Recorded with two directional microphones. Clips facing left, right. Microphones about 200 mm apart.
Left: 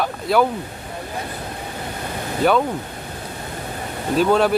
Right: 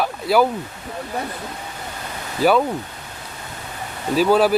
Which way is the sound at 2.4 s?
5° right (ahead or behind).